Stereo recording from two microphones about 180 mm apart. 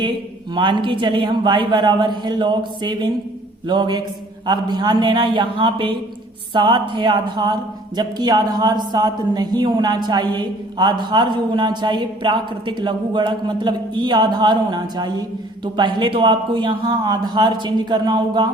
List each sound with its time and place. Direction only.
0.5 s speech: 25° right (ahead or behind)